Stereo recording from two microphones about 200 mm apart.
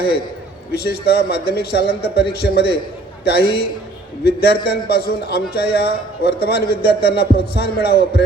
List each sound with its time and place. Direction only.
0.7 s a man's voice: 50° left (ahead or behind)